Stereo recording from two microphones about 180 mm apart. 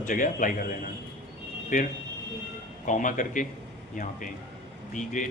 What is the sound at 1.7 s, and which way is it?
A man's voice, 45° left (ahead or behind).